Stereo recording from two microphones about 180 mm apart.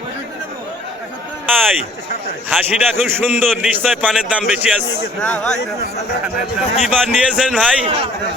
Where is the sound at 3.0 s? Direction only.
10° right (ahead or behind).